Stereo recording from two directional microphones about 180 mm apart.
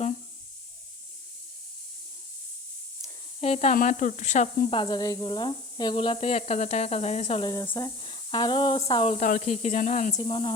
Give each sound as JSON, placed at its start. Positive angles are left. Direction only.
{"t": 3.4, "sound": "speech", "side_deg": 35}
{"t": 4.7, "sound": "speech", "side_deg": 25}
{"t": 10.2, "sound": "speech", "side_deg": 25}